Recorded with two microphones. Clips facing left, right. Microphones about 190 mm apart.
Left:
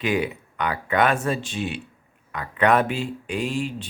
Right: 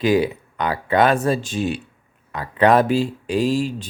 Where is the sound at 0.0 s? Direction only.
35° right (ahead or behind).